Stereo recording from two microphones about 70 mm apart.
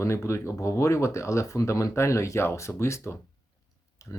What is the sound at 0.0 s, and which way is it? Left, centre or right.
Speech, left.